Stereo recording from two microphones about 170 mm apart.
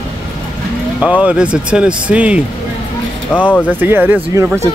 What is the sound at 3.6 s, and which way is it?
Speech, 10° right (ahead or behind).